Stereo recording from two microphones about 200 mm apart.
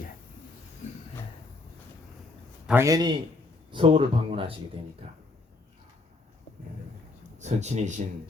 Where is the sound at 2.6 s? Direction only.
15° right (ahead or behind).